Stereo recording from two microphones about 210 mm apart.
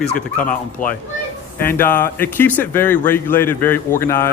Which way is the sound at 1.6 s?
10° left (ahead or behind).